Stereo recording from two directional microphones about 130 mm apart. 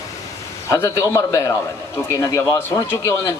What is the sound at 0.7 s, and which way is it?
Speech, 20° left (ahead or behind).